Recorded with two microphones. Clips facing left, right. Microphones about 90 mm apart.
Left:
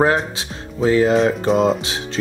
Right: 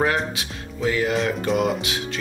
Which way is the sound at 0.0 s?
30° left (ahead or behind).